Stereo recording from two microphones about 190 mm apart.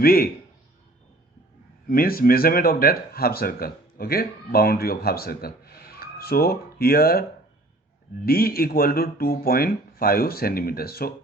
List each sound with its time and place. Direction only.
0.0 s speech: 50° left (ahead or behind)
1.9 s speech: 50° left (ahead or behind)